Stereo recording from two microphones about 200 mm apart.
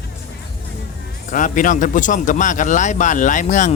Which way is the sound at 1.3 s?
40° left (ahead or behind).